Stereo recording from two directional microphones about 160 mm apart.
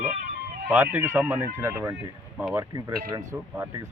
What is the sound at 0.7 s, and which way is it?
Speech, 15° right (ahead or behind).